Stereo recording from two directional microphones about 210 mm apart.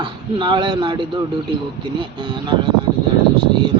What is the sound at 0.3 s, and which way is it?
Speech, 20° right (ahead or behind).